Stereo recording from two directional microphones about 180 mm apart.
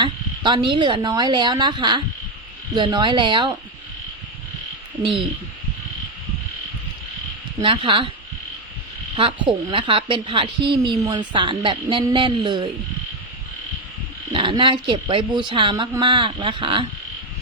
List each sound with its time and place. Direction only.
0.0 s speech: 25° right (ahead or behind)
7.6 s speech: 30° right (ahead or behind)
9.1 s speech: 30° right (ahead or behind)
14.3 s speech: 25° right (ahead or behind)